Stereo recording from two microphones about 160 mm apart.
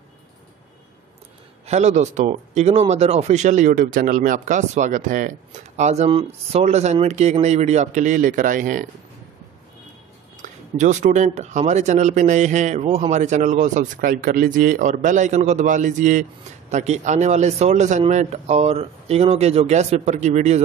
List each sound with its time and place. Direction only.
1.7 s speech: 45° right (ahead or behind)
10.3 s speech: 50° right (ahead or behind)